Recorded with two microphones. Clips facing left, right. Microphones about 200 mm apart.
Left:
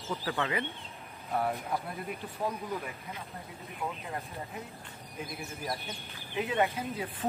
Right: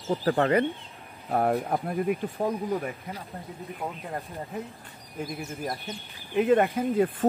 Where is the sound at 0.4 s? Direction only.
50° right (ahead or behind).